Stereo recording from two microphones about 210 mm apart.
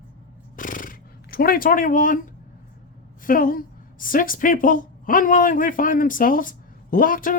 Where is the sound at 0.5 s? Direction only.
40° left (ahead or behind).